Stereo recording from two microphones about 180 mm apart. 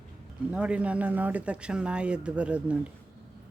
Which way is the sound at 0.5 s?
5° right (ahead or behind).